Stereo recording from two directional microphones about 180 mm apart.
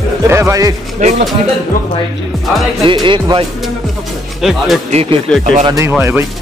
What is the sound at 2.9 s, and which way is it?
Speech, 25° right (ahead or behind).